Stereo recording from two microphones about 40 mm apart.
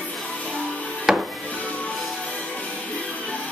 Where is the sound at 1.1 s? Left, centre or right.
Centre.